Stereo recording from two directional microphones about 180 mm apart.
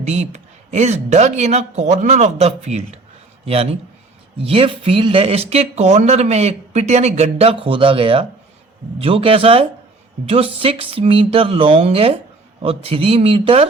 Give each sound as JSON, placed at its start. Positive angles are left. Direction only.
{"t": 0.0, "sound": "speech", "side_deg": -40}